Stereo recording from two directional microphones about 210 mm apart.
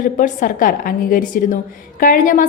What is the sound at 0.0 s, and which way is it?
A woman's voice, 40° left (ahead or behind).